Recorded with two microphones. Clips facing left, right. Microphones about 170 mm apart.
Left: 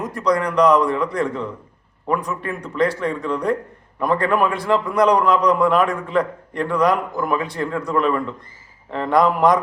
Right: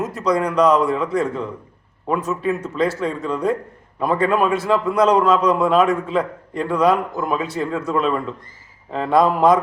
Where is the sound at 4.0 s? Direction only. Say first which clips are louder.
Right 1 dB; 5° right (ahead or behind).